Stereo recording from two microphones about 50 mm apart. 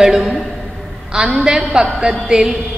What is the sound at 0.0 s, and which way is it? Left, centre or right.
A woman's voice, centre.